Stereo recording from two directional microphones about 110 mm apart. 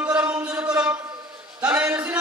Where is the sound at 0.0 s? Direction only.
15° right (ahead or behind).